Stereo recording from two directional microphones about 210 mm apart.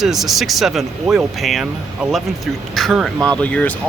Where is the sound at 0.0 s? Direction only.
Centre (ahead or behind).